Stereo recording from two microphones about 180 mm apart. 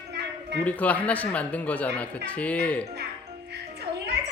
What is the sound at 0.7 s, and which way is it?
Speech, 10° left (ahead or behind).